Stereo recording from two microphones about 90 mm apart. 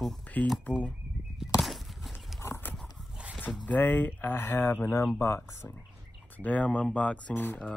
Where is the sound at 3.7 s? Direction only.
20° left (ahead or behind).